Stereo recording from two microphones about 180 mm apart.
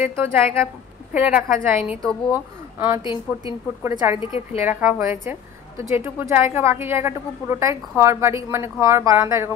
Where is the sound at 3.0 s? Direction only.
25° left (ahead or behind).